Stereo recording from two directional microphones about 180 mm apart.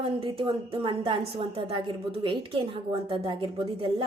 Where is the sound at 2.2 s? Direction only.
30° right (ahead or behind).